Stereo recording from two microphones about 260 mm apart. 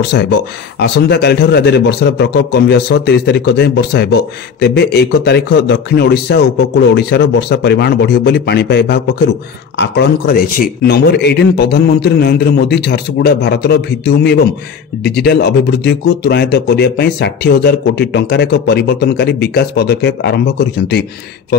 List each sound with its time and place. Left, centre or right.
0.1 s speech: left